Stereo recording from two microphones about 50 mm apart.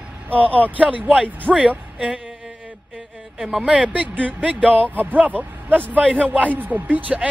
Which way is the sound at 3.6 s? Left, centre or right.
Right.